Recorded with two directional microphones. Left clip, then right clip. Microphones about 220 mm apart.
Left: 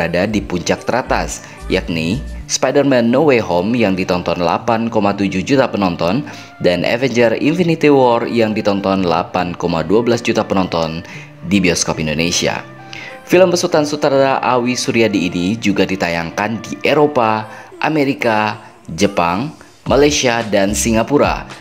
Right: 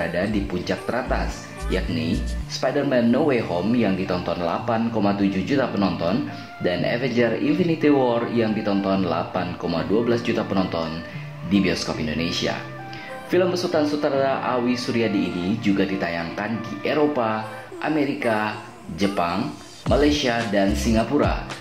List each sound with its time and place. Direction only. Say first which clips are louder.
0.0 s speech: left 8 dB; 45° left (ahead or behind)
2.5 s speech: left 8 dB; 45° left (ahead or behind)